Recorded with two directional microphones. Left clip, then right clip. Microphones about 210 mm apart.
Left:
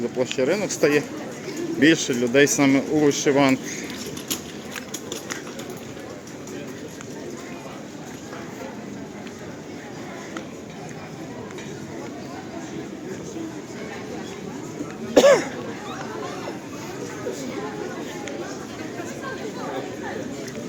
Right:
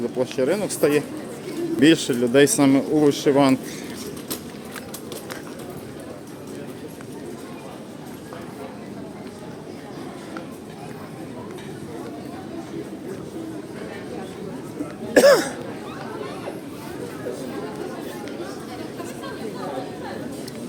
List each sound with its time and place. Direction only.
0.2 s speech: 10° right (ahead or behind)
15.1 s cough: 40° right (ahead or behind)